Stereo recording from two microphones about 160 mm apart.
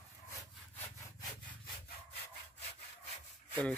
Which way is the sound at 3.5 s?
10° left (ahead or behind).